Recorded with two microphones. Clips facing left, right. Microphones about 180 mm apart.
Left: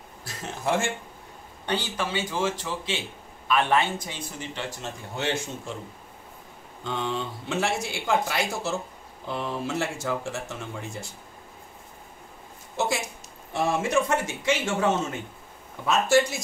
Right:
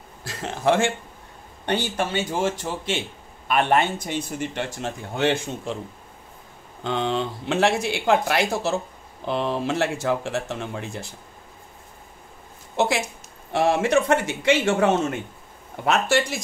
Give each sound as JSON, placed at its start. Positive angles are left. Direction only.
{"t": 0.3, "sound": "speech", "side_deg": -65}
{"t": 1.7, "sound": "speech", "side_deg": -50}
{"t": 6.8, "sound": "speech", "side_deg": -80}
{"t": 12.7, "sound": "speech", "side_deg": -65}